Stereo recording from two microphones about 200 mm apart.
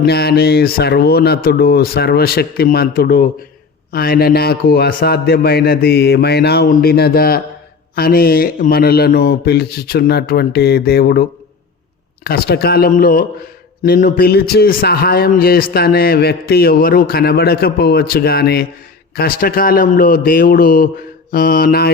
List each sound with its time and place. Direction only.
0.0 s a man's voice: 55° left (ahead or behind)